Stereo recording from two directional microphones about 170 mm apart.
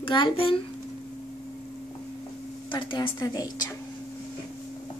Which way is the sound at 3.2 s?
20° left (ahead or behind).